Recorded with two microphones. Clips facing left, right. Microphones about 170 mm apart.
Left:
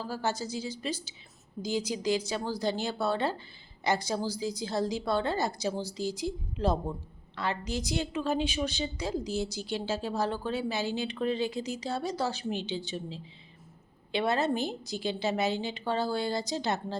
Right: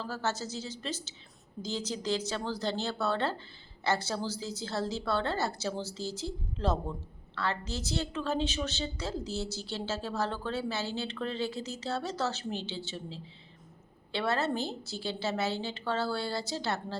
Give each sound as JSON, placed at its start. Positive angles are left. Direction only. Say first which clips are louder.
{"t": 0.0, "sound": "a woman's voice", "louder": "left 2 dB", "side_deg": 10}